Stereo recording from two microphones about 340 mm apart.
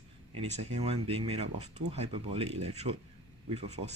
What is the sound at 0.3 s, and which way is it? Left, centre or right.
Speech, centre.